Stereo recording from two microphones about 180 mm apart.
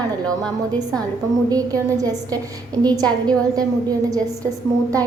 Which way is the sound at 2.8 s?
20° right (ahead or behind).